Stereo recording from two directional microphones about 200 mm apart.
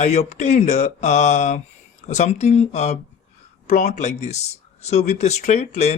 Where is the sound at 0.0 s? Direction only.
35° left (ahead or behind).